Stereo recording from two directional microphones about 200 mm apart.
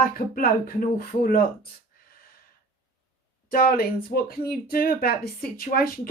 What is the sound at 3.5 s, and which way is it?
Speech, 50° left (ahead or behind).